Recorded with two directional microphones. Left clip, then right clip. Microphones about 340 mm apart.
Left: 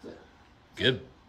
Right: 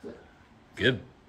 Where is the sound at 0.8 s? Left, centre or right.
Centre.